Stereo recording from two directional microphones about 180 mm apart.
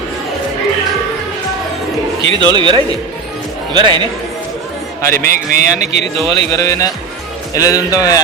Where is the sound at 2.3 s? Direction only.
25° right (ahead or behind).